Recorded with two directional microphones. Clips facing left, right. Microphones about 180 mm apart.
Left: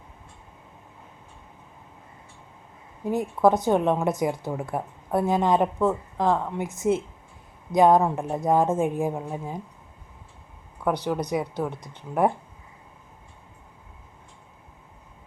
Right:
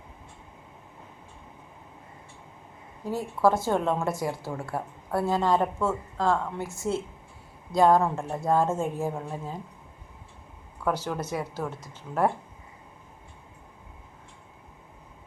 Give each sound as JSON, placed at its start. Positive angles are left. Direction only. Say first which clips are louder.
{"t": 3.0, "sound": "a woman's voice", "louder": "left 3 dB", "side_deg": 20}
{"t": 10.8, "sound": "speech", "louder": "left 3 dB", "side_deg": 15}